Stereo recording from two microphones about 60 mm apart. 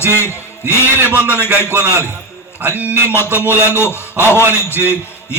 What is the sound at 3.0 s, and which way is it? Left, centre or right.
A man's voice, left.